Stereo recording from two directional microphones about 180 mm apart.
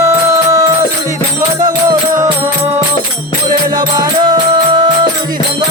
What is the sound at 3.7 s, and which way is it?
Music, 25° right (ahead or behind).